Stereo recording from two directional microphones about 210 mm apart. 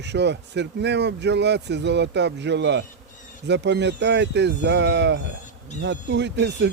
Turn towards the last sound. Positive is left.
turn(degrees=-55)  # may be behind; listen again after turning